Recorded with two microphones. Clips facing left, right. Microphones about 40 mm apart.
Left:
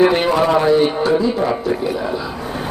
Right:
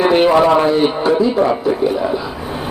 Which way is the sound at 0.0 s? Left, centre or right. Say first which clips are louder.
Right 3 dB; centre.